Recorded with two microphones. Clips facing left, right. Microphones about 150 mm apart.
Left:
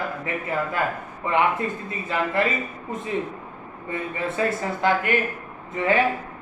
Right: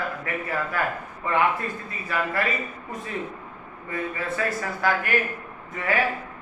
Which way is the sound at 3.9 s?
20° left (ahead or behind).